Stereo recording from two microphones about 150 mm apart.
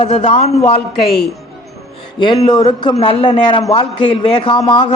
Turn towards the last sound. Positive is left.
turn(degrees=35)  # may be behind; listen again after turning